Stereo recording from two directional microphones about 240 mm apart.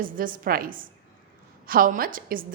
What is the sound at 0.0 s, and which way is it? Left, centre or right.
A woman's voice, right.